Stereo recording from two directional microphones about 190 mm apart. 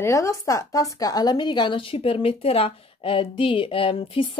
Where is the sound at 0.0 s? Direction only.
15° left (ahead or behind).